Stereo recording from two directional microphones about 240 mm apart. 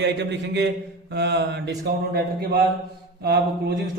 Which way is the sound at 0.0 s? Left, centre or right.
Right.